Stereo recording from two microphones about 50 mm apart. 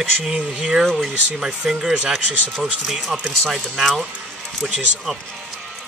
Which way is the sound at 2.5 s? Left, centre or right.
Centre.